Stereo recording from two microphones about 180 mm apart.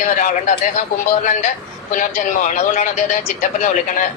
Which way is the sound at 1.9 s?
45° left (ahead or behind).